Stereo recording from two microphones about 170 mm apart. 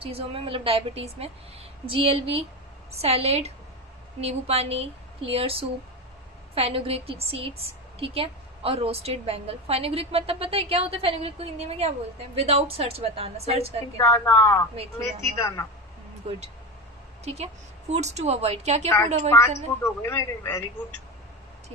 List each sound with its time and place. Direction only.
0.0 s a woman's voice: 35° right (ahead or behind)
13.9 s a woman's voice: 15° left (ahead or behind)
16.2 s a woman's voice: 35° right (ahead or behind)
19.3 s a woman's voice: 15° left (ahead or behind)